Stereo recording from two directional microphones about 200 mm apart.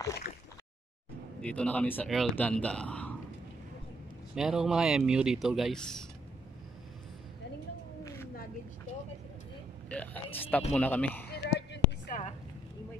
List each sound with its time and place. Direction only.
1.4 s speech: 5° left (ahead or behind)
4.4 s speech: 5° right (ahead or behind)
8.0 s cat: 15° left (ahead or behind)
9.8 s speech: 5° left (ahead or behind)
11.2 s a sound: 55° left (ahead or behind)